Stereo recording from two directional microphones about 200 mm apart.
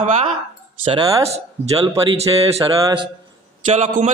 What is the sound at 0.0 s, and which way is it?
Speech, 35° right (ahead or behind).